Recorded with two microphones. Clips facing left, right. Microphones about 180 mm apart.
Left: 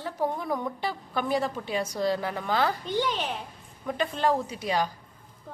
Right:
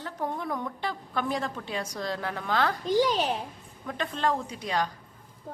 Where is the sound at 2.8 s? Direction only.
40° right (ahead or behind).